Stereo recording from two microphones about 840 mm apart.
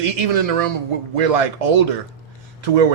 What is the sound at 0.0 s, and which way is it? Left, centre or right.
A man's voice, right.